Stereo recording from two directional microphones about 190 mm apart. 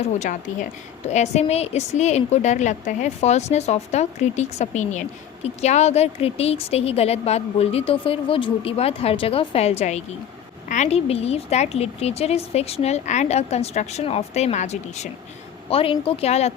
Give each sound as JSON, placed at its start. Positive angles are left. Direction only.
{"t": 0.2, "sound": "a woman's voice", "side_deg": 40}